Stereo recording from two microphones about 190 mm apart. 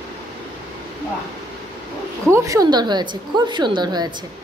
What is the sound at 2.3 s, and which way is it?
A woman's voice, 15° right (ahead or behind).